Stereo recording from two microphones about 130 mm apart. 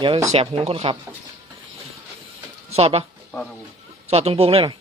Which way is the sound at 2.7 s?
50° right (ahead or behind).